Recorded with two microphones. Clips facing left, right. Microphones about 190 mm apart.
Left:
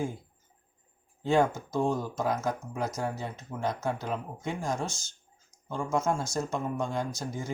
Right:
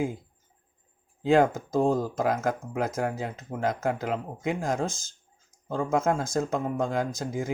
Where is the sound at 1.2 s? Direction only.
90° right.